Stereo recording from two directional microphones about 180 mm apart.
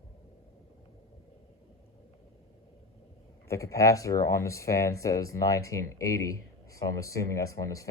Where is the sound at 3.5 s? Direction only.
15° left (ahead or behind).